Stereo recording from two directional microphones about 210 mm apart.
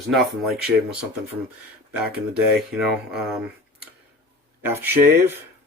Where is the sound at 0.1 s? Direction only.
Centre (ahead or behind).